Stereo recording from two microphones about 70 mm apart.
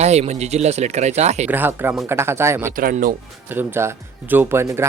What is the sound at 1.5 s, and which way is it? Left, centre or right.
Speech, right.